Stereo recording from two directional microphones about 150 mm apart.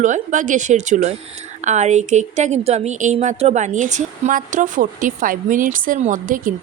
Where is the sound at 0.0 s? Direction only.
55° right (ahead or behind).